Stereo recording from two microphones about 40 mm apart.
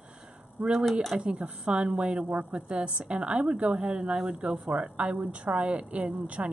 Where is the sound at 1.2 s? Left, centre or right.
Right.